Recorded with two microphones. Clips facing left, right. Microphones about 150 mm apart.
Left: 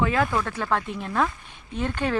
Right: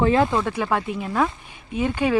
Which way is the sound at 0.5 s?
10° right (ahead or behind).